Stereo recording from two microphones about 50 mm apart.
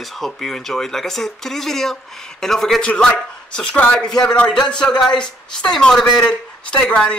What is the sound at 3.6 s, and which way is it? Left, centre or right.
Speech, left.